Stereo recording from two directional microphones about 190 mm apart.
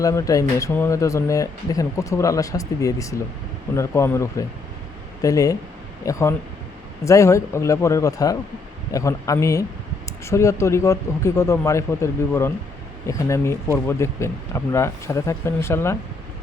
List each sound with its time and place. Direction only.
0.0 s speech: 15° left (ahead or behind)